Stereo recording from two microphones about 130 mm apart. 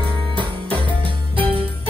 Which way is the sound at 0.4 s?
40° right (ahead or behind).